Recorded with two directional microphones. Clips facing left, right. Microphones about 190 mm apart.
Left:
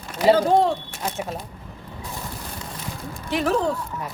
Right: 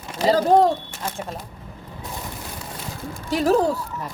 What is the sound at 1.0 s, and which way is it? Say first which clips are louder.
Speech: left 2 dB; 10° left (ahead or behind).